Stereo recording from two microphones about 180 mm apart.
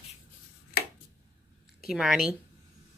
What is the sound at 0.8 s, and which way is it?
Finger snapping, 60° left (ahead or behind).